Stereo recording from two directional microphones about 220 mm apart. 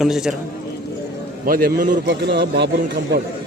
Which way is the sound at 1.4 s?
40° right (ahead or behind).